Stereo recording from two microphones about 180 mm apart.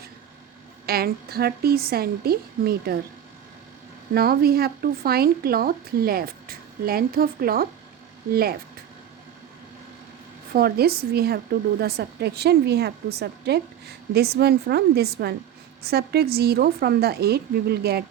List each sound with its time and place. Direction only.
0.9 s speech: 60° right (ahead or behind)
4.1 s speech: 60° right (ahead or behind)
10.5 s speech: 60° right (ahead or behind)